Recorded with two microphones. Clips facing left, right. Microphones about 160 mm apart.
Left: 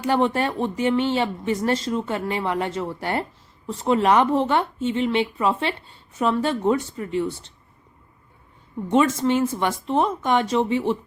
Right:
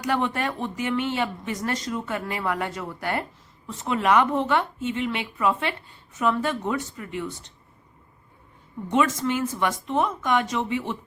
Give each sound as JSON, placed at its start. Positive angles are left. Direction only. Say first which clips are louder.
{"t": 0.0, "sound": "speech", "louder": "left 4 dB", "side_deg": 30}
{"t": 8.9, "sound": "speech", "louder": "left 4 dB", "side_deg": 30}